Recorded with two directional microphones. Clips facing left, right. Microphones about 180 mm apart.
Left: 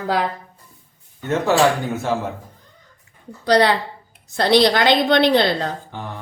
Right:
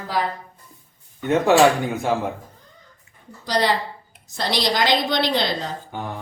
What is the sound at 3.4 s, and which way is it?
A woman's voice, 65° left (ahead or behind).